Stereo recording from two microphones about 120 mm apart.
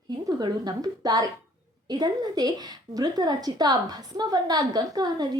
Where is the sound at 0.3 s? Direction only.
35° right (ahead or behind).